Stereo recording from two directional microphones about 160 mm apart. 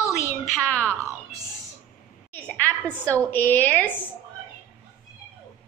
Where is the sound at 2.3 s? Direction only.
10° left (ahead or behind).